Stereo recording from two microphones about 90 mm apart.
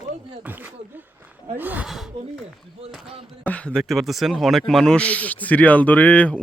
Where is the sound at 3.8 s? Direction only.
Centre (ahead or behind).